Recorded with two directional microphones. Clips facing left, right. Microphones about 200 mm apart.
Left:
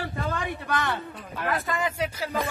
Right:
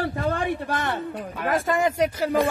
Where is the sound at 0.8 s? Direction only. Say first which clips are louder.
Right 3 dB; 50° right (ahead or behind).